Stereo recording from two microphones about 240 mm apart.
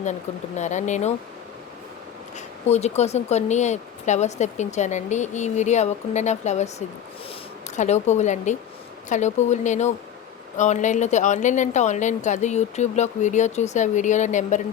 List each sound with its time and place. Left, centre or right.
0.0 s speech: left
2.6 s speech: left